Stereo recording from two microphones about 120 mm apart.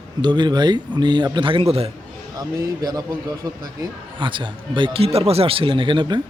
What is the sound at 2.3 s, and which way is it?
Speech, 35° right (ahead or behind).